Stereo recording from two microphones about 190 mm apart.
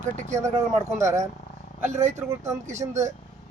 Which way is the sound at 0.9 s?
15° right (ahead or behind).